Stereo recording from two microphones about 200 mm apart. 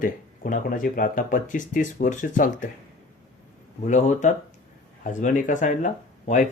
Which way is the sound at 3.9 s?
40° left (ahead or behind).